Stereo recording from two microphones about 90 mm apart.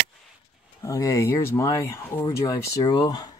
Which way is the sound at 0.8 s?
35° left (ahead or behind).